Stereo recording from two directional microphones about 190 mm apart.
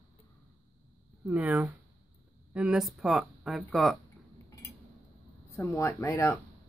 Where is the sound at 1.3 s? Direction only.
10° right (ahead or behind).